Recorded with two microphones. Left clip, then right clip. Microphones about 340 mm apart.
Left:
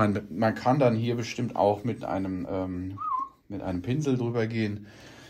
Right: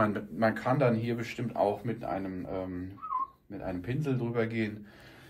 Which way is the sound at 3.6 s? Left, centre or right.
Centre.